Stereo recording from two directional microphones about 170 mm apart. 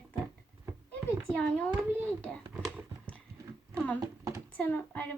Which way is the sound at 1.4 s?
10° left (ahead or behind).